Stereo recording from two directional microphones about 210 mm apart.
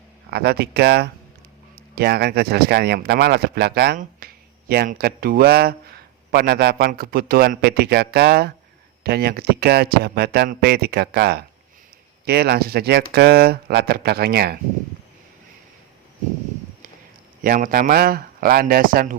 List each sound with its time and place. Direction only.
0.3 s speech: 50° right (ahead or behind)
17.4 s speech: 45° right (ahead or behind)